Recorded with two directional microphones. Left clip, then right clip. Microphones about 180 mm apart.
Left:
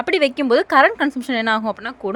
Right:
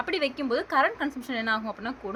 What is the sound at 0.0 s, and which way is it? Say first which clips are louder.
A woman's voice: left 10 dB; 50° left (ahead or behind).